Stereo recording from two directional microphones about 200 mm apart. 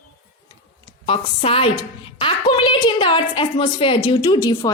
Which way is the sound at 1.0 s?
30° left (ahead or behind).